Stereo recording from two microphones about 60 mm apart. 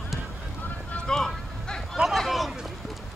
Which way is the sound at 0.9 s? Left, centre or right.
Centre.